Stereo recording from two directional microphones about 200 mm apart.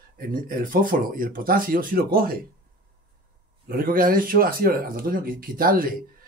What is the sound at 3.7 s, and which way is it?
Speech, 45° right (ahead or behind).